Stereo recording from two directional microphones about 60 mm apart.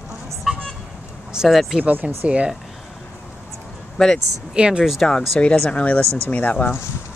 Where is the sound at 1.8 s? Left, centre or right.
Right.